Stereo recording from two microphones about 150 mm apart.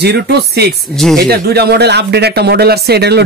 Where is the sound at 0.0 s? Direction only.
90° right.